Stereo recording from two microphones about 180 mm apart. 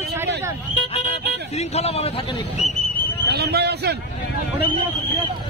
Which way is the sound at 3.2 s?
65° right (ahead or behind).